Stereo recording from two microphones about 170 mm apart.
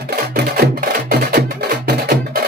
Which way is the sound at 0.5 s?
60° right (ahead or behind).